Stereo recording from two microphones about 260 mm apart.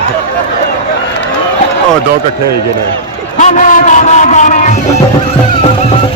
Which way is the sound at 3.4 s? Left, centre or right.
Left.